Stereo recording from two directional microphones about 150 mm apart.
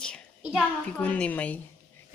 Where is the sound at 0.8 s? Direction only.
10° left (ahead or behind).